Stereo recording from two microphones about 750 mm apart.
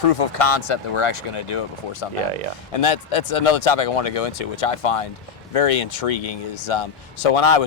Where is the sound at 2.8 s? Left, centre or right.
Left.